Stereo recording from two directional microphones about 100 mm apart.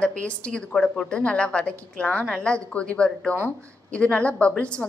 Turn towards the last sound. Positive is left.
turn(degrees=10)  # may be behind; listen again after turning